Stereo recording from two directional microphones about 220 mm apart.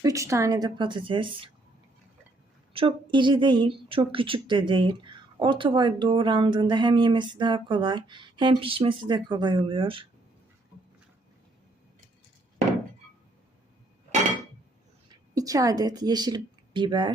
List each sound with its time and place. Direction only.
0.0 s a woman's voice: 15° right (ahead or behind)
2.7 s a woman's voice: 20° right (ahead or behind)
15.1 s speech: 15° right (ahead or behind)